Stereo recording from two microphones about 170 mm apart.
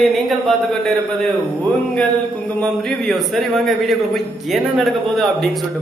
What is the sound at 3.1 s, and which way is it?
A man's voice, centre (ahead or behind).